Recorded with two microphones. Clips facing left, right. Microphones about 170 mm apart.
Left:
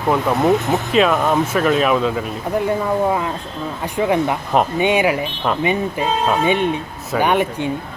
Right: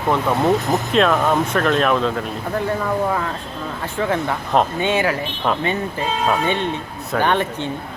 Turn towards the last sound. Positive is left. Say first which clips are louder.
# left 2 dB
turn(degrees=10)  # may be behind; listen again after turning